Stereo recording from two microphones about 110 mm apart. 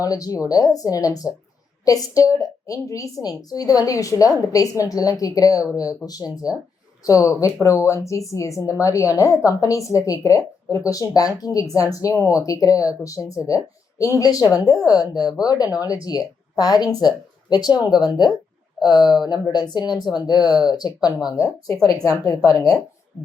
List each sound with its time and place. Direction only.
0.0 s a woman's voice: 35° left (ahead or behind)